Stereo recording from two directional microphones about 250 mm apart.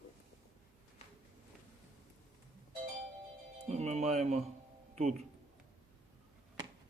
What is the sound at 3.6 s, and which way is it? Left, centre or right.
Speech, right.